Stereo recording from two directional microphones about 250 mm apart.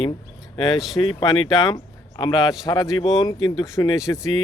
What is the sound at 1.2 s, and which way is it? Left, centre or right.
Speech, centre.